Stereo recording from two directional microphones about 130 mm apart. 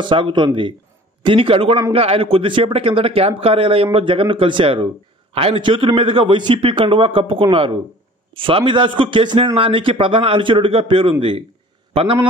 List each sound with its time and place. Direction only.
0.0 s a man's voice: 40° right (ahead or behind)